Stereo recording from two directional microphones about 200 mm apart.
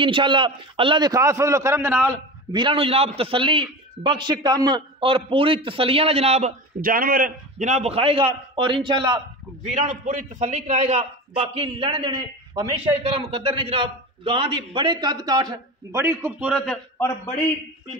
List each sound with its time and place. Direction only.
0.0 s a man's voice: 25° right (ahead or behind)
2.5 s a man's voice: 25° right (ahead or behind)
9.7 s a man's voice: 35° right (ahead or behind); by 16.8 s centre (ahead or behind)
17.0 s a man's voice: 10° left (ahead or behind)